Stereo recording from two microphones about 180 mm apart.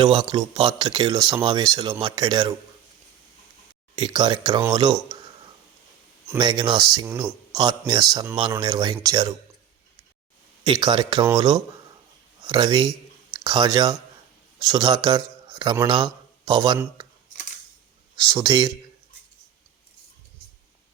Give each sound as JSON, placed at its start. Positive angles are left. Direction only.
{"t": 0.2, "sound": "speech", "side_deg": -20}
{"t": 3.9, "sound": "speech", "side_deg": -25}
{"t": 6.2, "sound": "speech", "side_deg": -20}
{"t": 10.6, "sound": "a man's voice", "side_deg": -20}
{"t": 18.2, "sound": "speech", "side_deg": -25}